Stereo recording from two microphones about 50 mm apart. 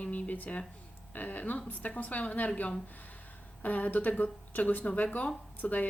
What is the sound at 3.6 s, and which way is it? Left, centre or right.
A woman's voice, left.